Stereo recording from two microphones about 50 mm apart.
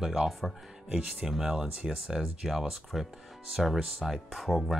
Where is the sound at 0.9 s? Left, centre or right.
Centre.